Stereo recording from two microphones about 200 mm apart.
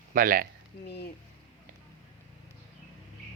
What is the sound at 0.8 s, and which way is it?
Speech, 55° left (ahead or behind).